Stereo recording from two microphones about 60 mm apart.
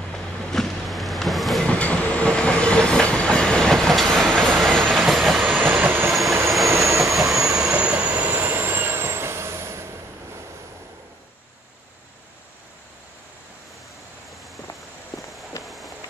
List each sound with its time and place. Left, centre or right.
0.1 s vehicle: centre
1.6 s train: left
5.0 s train: centre
5.5 s train: right
6.6 s train: right
7.5 s train: centre
8.3 s vehicle: right
15.6 s a sound: centre